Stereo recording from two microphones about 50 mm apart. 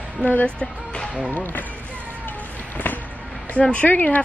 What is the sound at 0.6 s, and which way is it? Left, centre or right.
Speech, centre.